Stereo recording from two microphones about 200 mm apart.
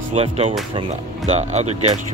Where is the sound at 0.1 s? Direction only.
30° right (ahead or behind).